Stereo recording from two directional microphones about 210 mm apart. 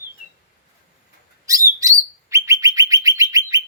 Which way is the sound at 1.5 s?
15° right (ahead or behind).